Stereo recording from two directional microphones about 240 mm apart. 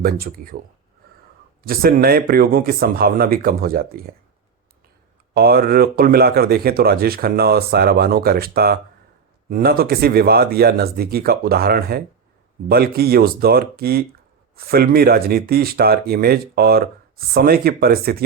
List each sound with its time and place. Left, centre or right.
0.0 s speech: right
1.6 s speech: right
5.3 s speech: right